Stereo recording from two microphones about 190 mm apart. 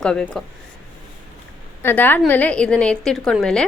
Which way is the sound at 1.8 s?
10° left (ahead or behind).